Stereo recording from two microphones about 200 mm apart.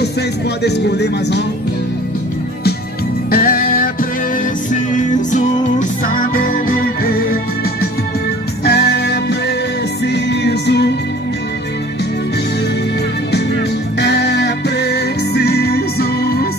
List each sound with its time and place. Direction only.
0.7 s speech: 55° left (ahead or behind)
3.3 s music: 45° left (ahead or behind)
8.6 s music: 55° left (ahead or behind)
13.9 s music: 55° left (ahead or behind)